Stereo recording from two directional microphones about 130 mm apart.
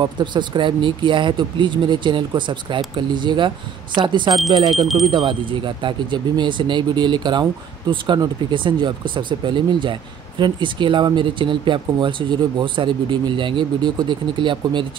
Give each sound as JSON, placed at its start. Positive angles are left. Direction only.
{"t": 0.0, "sound": "speech", "side_deg": -35}
{"t": 4.8, "sound": "speech", "side_deg": 0}
{"t": 5.1, "sound": "speech", "side_deg": -40}